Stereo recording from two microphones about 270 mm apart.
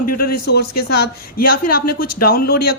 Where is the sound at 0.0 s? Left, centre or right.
Left.